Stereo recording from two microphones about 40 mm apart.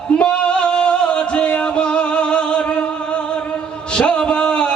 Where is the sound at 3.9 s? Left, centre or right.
Left.